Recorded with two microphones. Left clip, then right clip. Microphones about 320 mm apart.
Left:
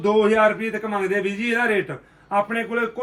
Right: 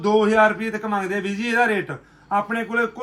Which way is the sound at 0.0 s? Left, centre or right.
Centre.